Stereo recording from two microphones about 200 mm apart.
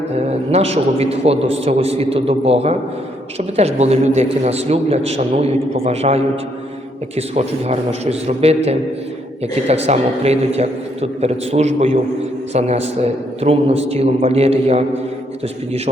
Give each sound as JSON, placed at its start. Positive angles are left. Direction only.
{"t": 0.2, "sound": "a man's voice", "side_deg": -30}